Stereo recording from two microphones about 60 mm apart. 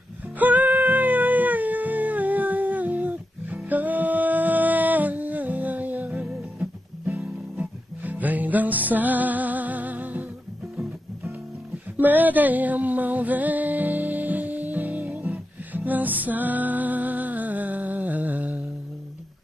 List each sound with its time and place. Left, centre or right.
0.4 s music: right
12.0 s music: right